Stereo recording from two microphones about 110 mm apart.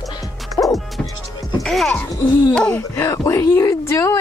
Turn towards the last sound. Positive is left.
turn(degrees=25)  # may be behind; listen again after turning